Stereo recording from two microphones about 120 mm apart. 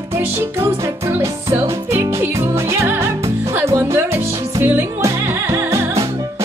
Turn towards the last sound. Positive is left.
turn(degrees=-25)  # may be behind; listen again after turning